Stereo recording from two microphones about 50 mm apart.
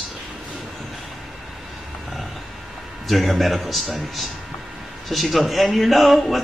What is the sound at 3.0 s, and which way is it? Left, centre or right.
Speech, centre.